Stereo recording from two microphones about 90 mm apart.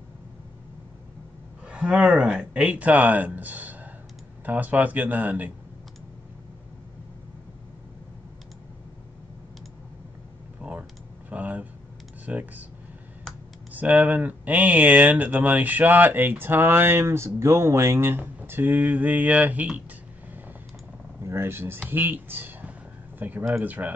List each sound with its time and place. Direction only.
1.7 s speech: 10° right (ahead or behind)
10.6 s computer keyboard: 15° right (ahead or behind)
12.3 s speech: 15° right (ahead or behind)
13.7 s speech: 15° right (ahead or behind)
21.2 s speech: 30° right (ahead or behind)